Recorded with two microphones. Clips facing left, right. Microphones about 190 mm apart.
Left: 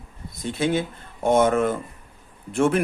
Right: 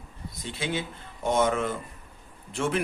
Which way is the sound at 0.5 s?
50° left (ahead or behind).